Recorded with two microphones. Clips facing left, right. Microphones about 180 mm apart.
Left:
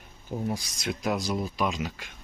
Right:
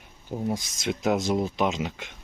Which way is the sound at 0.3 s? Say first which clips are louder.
Right 2 dB; 20° right (ahead or behind).